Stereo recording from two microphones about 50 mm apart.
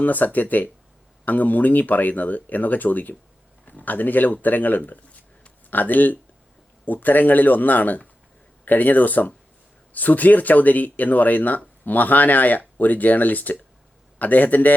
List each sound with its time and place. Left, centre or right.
0.0 s speech: left